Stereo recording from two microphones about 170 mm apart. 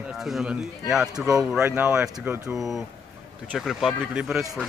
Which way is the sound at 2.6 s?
Centre (ahead or behind).